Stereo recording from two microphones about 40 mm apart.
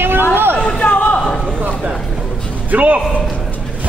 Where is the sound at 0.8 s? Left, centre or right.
Left.